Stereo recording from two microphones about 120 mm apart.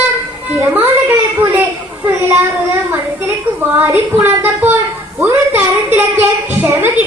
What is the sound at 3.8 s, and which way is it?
A woman's voice, 20° right (ahead or behind).